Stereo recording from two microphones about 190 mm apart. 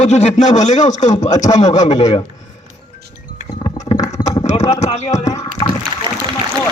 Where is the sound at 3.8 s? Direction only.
35° left (ahead or behind).